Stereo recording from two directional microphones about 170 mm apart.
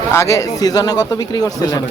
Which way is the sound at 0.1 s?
20° left (ahead or behind).